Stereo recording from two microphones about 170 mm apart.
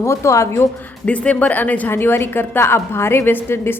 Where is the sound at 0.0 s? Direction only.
15° left (ahead or behind).